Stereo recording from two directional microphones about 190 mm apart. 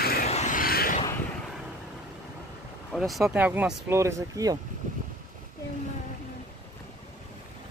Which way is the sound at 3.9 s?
15° right (ahead or behind).